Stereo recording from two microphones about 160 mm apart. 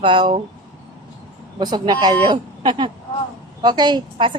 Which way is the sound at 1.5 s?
25° right (ahead or behind).